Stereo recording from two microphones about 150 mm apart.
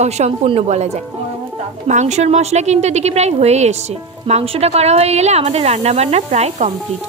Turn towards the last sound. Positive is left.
turn(degrees=-50)  # may be behind; listen again after turning